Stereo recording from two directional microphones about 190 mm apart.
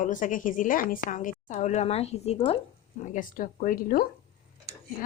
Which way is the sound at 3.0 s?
45° left (ahead or behind).